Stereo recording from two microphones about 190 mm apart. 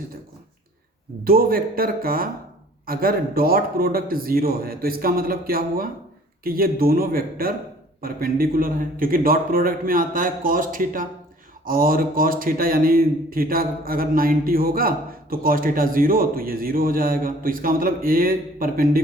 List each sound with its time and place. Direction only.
1.2 s speech: 50° right (ahead or behind)